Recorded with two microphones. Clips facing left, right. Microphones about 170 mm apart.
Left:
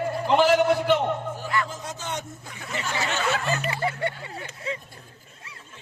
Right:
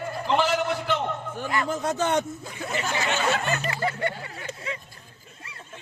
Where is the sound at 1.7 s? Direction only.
60° right (ahead or behind).